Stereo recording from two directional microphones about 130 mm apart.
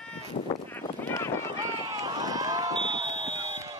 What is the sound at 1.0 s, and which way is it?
Run, 20° left (ahead or behind).